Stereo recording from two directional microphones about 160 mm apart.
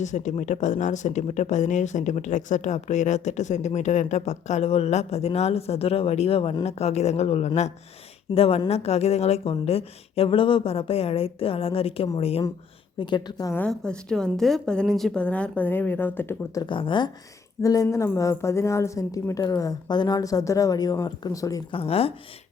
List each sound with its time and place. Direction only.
0.0 s a woman's voice: 50° left (ahead or behind)
13.0 s a woman's voice: 30° left (ahead or behind)
13.6 s a woman's voice: 5° left (ahead or behind)
16.6 s a woman's voice: 30° left (ahead or behind)
21.7 s a woman's voice: 35° left (ahead or behind)